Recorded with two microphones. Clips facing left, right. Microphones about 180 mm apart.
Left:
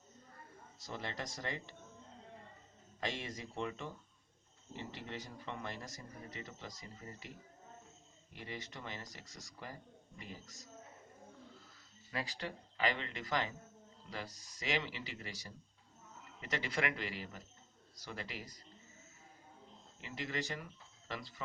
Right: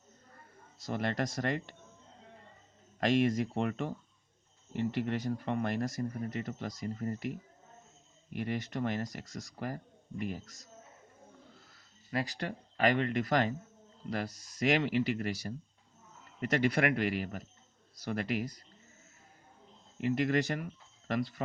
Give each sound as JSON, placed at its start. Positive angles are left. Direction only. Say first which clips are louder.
{"t": 0.9, "sound": "speech", "louder": "right 10 dB", "side_deg": -65}
{"t": 3.0, "sound": "speech", "louder": "right 14 dB", "side_deg": -65}
{"t": 12.1, "sound": "speech", "louder": "right 7 dB", "side_deg": -55}
{"t": 14.1, "sound": "speech", "louder": "right 10 dB", "side_deg": -70}
{"t": 20.0, "sound": "speech", "louder": "right 13 dB", "side_deg": -60}